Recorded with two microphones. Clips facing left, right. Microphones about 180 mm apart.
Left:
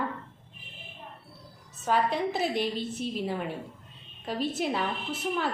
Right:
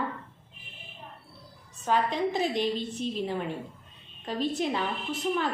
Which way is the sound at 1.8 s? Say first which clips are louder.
Even; 5° left (ahead or behind).